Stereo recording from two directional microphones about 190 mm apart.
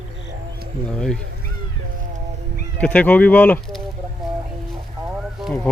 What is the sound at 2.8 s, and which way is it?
Speech, 5° left (ahead or behind).